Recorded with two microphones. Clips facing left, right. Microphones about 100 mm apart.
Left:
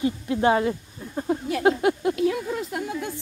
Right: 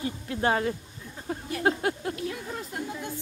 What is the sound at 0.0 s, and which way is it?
Speech, 20° left (ahead or behind).